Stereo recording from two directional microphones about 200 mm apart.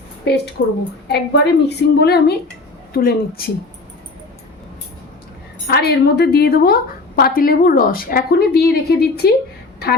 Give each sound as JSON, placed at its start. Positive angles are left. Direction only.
{"t": 0.6, "sound": "a woman's voice", "side_deg": 55}
{"t": 5.7, "sound": "a woman's voice", "side_deg": 55}